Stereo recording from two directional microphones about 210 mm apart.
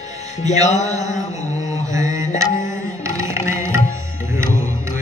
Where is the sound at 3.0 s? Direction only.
15° right (ahead or behind).